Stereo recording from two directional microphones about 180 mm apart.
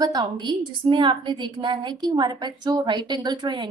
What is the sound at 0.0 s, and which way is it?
Speech, 25° right (ahead or behind).